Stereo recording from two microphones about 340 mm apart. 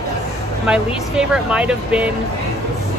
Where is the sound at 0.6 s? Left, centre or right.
Centre.